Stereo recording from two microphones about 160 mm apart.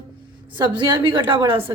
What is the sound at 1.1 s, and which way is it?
Speech, 30° right (ahead or behind).